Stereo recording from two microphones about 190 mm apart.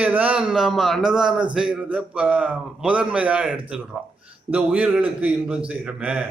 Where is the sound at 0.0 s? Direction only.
10° right (ahead or behind).